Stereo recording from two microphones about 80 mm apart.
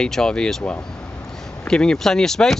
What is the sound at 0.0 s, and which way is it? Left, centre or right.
Speech, centre.